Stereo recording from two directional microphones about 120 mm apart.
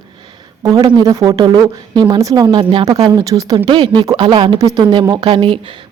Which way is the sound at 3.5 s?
40° right (ahead or behind).